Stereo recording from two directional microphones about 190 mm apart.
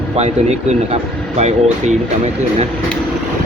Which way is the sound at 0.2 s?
35° right (ahead or behind).